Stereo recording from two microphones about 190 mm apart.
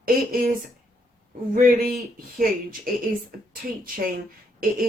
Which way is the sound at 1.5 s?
45° right (ahead or behind).